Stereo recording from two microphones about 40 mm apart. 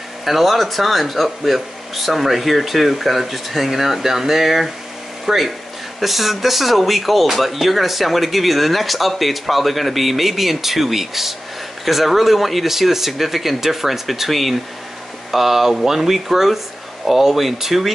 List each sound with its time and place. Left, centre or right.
0.2 s speech: centre